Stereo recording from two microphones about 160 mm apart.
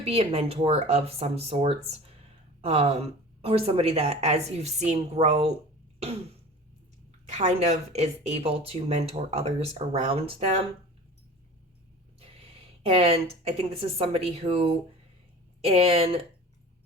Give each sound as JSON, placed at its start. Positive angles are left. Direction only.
{"t": 0.0, "sound": "speech", "side_deg": -40}
{"t": 7.3, "sound": "speech", "side_deg": -45}
{"t": 12.4, "sound": "a woman's voice", "side_deg": -35}